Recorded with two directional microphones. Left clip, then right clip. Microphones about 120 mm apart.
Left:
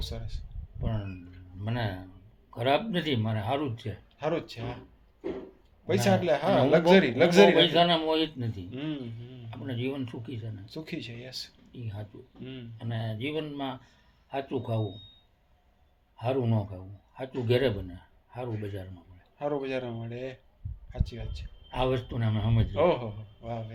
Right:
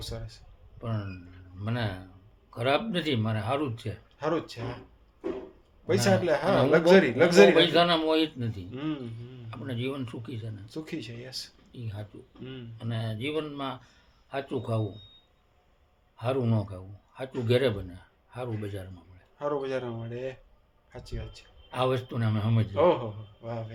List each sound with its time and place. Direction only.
0.0 s a man's voice: 20° right (ahead or behind)
5.8 s speech: 20° right (ahead or behind)
16.1 s a man's voice: 25° right (ahead or behind)
19.4 s a man's voice: 15° right (ahead or behind)
21.7 s a man's voice: 30° right (ahead or behind)
22.7 s a man's voice: 20° right (ahead or behind)